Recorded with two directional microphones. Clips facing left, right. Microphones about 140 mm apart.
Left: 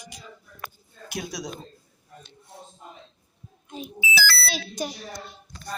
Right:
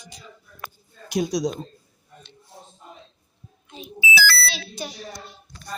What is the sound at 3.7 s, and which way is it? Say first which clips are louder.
Speech: left 4 dB; 45° left (ahead or behind).